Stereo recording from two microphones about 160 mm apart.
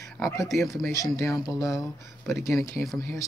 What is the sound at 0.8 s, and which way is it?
Speech, 20° left (ahead or behind).